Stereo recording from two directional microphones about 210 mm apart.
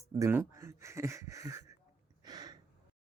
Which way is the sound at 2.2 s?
20° right (ahead or behind).